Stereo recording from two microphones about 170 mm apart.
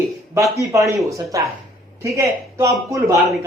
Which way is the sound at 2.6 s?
20° right (ahead or behind).